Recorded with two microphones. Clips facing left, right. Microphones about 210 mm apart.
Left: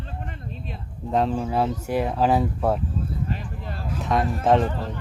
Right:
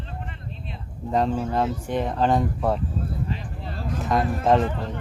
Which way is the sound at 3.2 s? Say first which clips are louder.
Left 1 dB; 50° left (ahead or behind).